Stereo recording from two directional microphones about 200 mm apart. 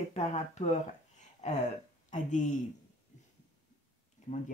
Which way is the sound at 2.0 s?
40° left (ahead or behind).